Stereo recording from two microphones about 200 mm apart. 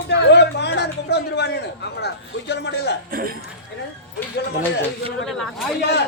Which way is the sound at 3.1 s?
45° right (ahead or behind).